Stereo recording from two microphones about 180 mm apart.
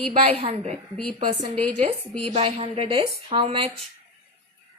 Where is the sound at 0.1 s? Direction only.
35° right (ahead or behind).